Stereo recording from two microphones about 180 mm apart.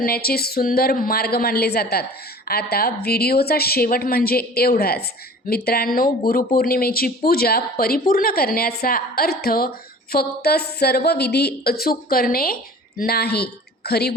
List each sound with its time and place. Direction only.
0.0 s speech: 55° left (ahead or behind)